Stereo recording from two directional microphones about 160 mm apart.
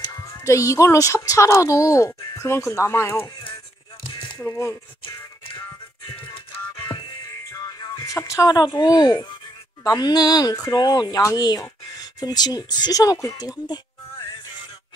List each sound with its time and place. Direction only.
0.0 s speech: 20° left (ahead or behind)
4.0 s music: 30° left (ahead or behind)
4.4 s speech: 20° left (ahead or behind)
6.0 s music: 35° left (ahead or behind)
7.5 s speech: 25° left (ahead or behind)